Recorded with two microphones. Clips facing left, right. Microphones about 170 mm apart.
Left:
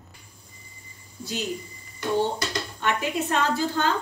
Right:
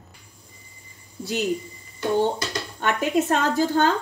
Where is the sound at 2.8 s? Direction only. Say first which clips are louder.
Right 5 dB; 40° right (ahead or behind).